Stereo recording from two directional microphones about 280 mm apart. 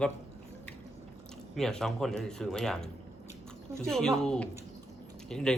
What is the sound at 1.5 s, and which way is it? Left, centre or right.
Speech, centre.